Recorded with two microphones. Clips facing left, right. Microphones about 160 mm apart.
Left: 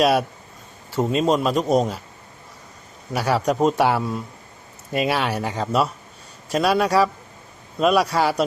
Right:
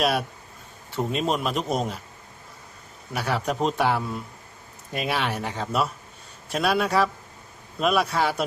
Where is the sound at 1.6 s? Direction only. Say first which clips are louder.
Left 7 dB; 40° left (ahead or behind).